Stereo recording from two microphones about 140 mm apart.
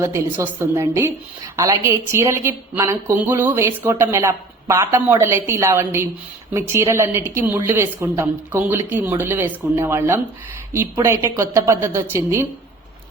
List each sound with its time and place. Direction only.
0.0 s a woman's voice: 20° right (ahead or behind)